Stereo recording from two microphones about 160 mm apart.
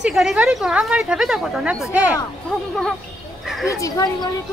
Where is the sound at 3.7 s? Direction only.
20° left (ahead or behind).